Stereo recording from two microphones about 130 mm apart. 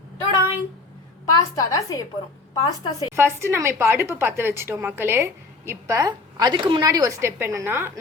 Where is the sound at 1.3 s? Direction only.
30° left (ahead or behind).